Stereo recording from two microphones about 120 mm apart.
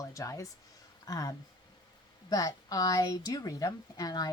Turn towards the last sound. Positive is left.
turn(degrees=30)  # may be behind; listen again after turning